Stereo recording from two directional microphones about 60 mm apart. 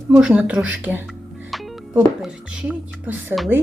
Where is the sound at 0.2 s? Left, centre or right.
Centre.